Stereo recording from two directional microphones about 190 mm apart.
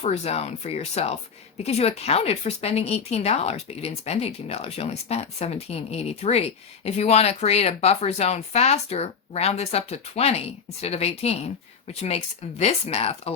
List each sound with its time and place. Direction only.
0.0 s speech: 35° left (ahead or behind)